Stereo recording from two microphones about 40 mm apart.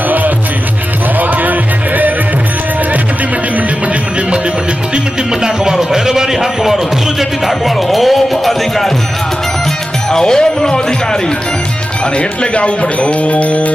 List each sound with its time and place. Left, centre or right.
1.2 s music: right
5.3 s a sound: centre
7.2 s music: centre
10.1 s music: centre
12.1 s speech: left